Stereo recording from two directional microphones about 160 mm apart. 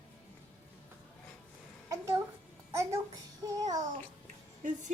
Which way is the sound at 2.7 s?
20° right (ahead or behind).